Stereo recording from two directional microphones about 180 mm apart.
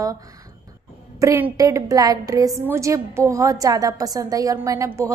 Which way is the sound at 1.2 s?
15° right (ahead or behind).